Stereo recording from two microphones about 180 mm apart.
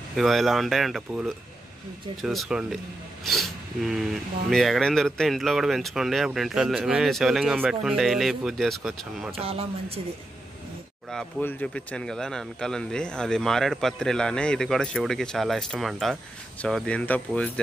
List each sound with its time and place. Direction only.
0.1 s speech: centre (ahead or behind)
9.4 s speech: 35° right (ahead or behind)
11.1 s speech: 5° left (ahead or behind)